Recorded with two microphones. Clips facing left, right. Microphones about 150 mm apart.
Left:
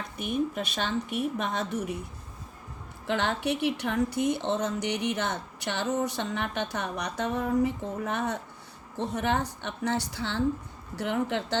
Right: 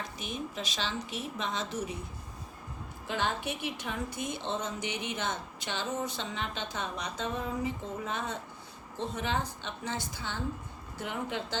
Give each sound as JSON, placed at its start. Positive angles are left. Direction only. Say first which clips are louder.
{"t": 0.2, "sound": "a woman's voice", "louder": "left 11 dB", "side_deg": 55}
{"t": 3.1, "sound": "a woman's voice", "louder": "left 5 dB", "side_deg": 65}